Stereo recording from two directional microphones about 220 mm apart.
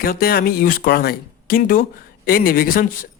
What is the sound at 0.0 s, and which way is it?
Speech, 40° left (ahead or behind).